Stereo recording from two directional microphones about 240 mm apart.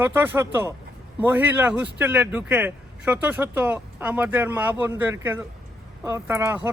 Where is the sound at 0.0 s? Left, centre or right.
Centre.